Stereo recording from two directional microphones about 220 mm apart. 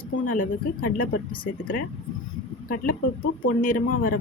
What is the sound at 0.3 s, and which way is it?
Speech, 35° left (ahead or behind).